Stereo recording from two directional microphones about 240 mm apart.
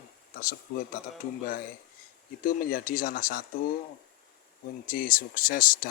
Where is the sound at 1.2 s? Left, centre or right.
Left.